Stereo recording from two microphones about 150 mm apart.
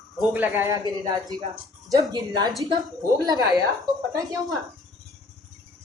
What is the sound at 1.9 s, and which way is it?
Speech, 25° right (ahead or behind).